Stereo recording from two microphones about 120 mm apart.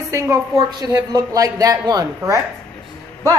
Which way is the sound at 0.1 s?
25° right (ahead or behind).